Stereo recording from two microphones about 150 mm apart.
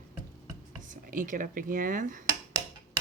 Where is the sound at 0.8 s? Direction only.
60° right (ahead or behind).